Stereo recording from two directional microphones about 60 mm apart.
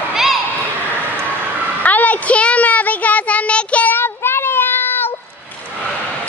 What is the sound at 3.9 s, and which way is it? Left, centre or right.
Child singing, left.